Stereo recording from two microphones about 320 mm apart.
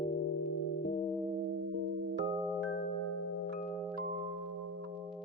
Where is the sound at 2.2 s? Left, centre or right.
Centre.